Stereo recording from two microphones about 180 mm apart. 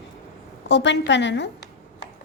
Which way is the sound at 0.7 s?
80° left.